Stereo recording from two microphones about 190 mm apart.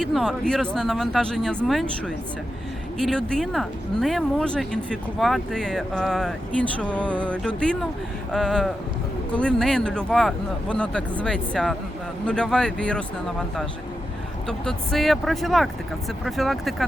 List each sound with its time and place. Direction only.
0.0 s speech: centre (ahead or behind)
14.4 s speech: 5° left (ahead or behind)